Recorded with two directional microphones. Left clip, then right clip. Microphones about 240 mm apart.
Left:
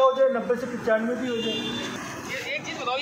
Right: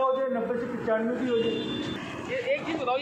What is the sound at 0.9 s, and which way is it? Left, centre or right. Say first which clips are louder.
Speech: left 4 dB; left.